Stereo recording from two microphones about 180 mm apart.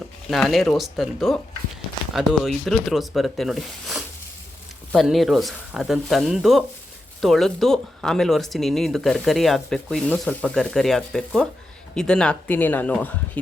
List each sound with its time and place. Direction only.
0.3 s speech: centre (ahead or behind)